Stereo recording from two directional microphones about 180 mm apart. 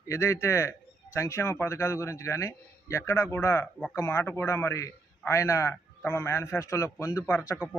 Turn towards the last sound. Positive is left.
turn(degrees=15)  # may be behind; listen again after turning